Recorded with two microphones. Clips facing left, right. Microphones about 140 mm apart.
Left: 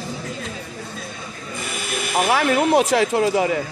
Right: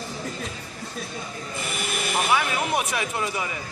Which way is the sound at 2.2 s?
60° left (ahead or behind).